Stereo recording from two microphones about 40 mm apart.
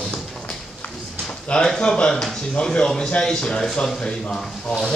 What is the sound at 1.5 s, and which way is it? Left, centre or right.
A man's voice, left.